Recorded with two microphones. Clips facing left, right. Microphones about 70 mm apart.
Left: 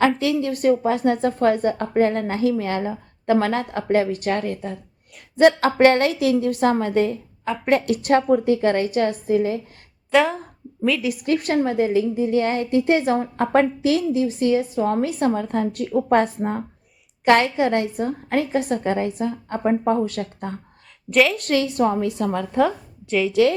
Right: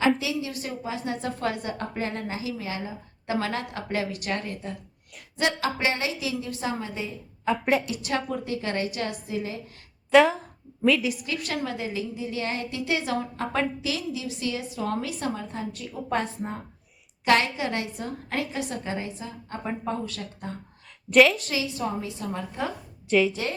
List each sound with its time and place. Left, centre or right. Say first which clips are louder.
0.2 s a woman's voice: left 10 dB; left
7.4 s a woman's voice: left 4 dB; centre
7.9 s a woman's voice: left 12 dB; left
10.1 s a woman's voice: even; centre
11.2 s a woman's voice: left 10 dB; left
21.1 s a woman's voice: even; centre
21.3 s a woman's voice: left 10 dB; left
23.0 s a woman's voice: even; centre
23.3 s a woman's voice: left 14 dB; left